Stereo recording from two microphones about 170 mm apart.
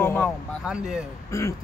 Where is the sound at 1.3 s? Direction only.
15° left (ahead or behind).